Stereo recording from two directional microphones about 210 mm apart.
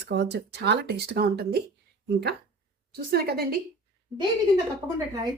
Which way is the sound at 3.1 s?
45° right (ahead or behind).